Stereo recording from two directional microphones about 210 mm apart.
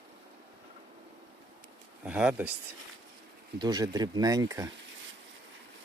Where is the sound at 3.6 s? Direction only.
20° right (ahead or behind).